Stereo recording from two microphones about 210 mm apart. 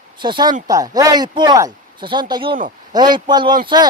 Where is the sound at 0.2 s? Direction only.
20° right (ahead or behind).